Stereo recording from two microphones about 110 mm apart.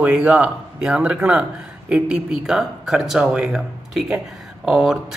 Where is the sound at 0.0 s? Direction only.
10° right (ahead or behind).